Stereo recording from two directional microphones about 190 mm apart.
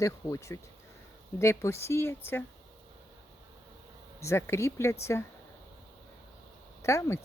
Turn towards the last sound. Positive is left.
turn(degrees=15)  # may be behind; listen again after turning